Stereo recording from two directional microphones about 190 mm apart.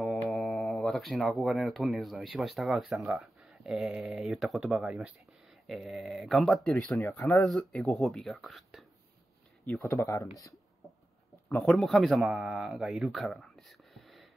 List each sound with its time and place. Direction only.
0.3 s speech: centre (ahead or behind)
9.7 s a man's voice: 15° left (ahead or behind)